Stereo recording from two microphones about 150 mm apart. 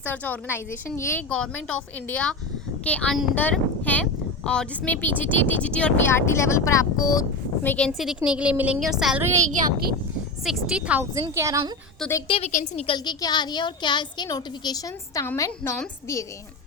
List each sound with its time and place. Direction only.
0.0 s speech: 10° left (ahead or behind)
7.6 s speech: 10° left (ahead or behind)
7.9 s a woman's voice: centre (ahead or behind)
9.2 s a woman's voice: 20° right (ahead or behind)
10.4 s speech: 5° right (ahead or behind)
11.1 s a woman's voice: 20° right (ahead or behind)
12.5 s a woman's voice: 60° left (ahead or behind)
12.8 s a woman's voice: 30° left (ahead or behind)